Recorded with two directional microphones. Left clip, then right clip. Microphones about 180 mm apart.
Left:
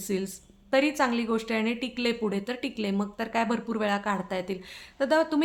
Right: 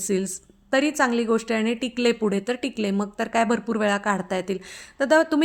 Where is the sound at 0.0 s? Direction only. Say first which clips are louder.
Right 6 dB; 35° right (ahead or behind).